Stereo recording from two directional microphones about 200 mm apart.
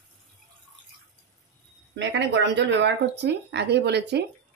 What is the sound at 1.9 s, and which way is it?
Speech, 65° right (ahead or behind).